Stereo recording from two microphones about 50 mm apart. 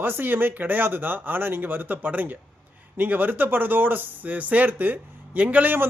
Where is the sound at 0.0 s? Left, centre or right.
Right.